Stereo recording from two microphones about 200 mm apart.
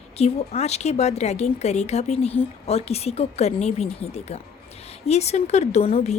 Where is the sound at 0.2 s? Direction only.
30° left (ahead or behind).